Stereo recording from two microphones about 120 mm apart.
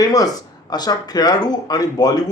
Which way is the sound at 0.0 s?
30° left (ahead or behind).